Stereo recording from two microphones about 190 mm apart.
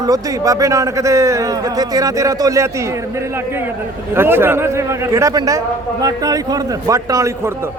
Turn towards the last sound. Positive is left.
turn(degrees=-15)  # may be behind; listen again after turning